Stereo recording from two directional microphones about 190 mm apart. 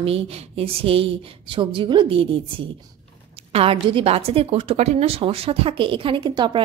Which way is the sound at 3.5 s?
30° right (ahead or behind).